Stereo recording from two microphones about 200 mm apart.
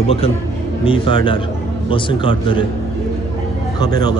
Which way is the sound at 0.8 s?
25° left (ahead or behind).